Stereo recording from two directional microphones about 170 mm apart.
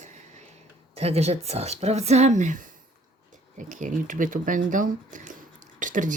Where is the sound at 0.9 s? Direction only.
35° right (ahead or behind).